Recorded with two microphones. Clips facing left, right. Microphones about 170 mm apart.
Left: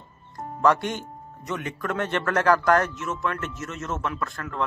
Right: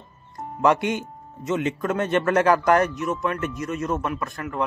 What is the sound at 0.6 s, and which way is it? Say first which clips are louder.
Speech: right 2 dB; 20° right (ahead or behind).